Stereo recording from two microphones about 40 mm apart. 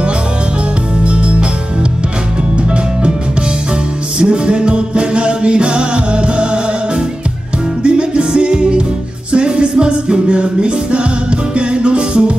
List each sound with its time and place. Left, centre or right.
1.0 s music: right
2.7 s music: right
4.2 s music: right
7.8 s music: right